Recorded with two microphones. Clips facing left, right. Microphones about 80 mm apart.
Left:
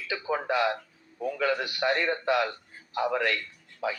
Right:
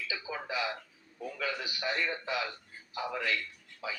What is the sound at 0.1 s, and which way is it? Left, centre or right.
A man's voice, left.